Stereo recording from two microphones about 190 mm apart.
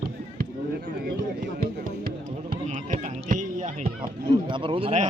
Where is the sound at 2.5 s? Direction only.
45° right (ahead or behind).